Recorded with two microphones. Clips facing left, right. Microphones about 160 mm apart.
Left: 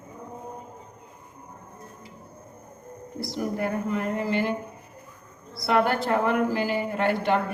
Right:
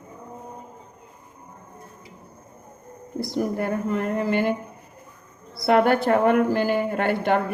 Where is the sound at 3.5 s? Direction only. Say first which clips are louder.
Right 2 dB; 50° right (ahead or behind).